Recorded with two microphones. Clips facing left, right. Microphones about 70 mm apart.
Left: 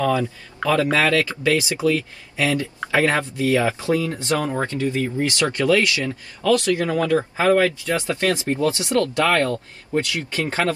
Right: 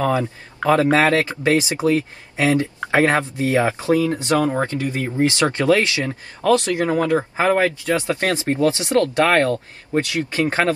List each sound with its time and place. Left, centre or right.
0.0 s speech: right